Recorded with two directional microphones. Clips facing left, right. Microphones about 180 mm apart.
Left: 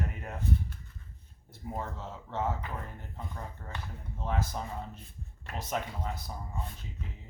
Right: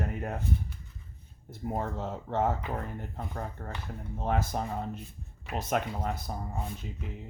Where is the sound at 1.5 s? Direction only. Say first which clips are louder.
Right 5 dB; 50° right (ahead or behind).